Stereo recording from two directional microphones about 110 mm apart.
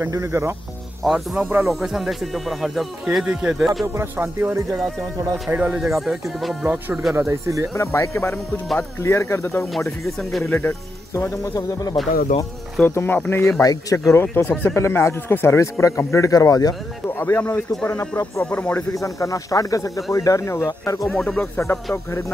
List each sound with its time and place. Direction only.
0.0 s music: 25° right (ahead or behind)
1.0 s speech: centre (ahead or behind)
3.8 s music: 25° right (ahead or behind)
5.2 s speech: 15° right (ahead or behind)
7.2 s music: 25° right (ahead or behind)
7.7 s speech: 25° left (ahead or behind)
9.8 s speech: centre (ahead or behind)
10.4 s speech: 20° left (ahead or behind)
17.1 s speech: 20° left (ahead or behind)
18.4 s speech: 15° left (ahead or behind)
18.9 s speech: 30° left (ahead or behind)
21.1 s speech: 5° left (ahead or behind)